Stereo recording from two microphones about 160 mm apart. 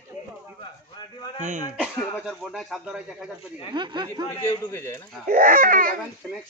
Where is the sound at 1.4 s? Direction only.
50° right (ahead or behind).